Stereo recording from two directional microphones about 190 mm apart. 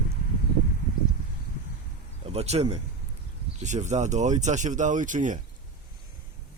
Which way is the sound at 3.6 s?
40° right (ahead or behind).